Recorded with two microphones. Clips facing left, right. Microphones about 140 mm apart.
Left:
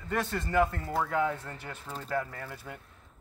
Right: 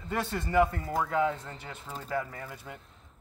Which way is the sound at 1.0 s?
20° right (ahead or behind).